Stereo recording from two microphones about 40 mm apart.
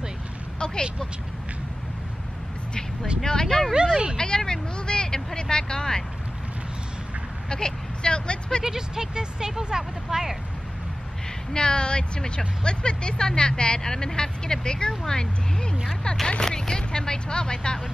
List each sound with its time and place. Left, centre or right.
3.3 s speech: centre
3.7 s speech: centre
4.2 s vehicle: centre
7.4 s speech: centre
8.6 s speech: centre
11.5 s speech: left